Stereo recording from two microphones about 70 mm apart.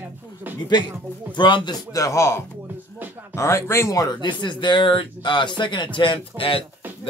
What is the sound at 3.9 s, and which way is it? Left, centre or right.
Speech, left.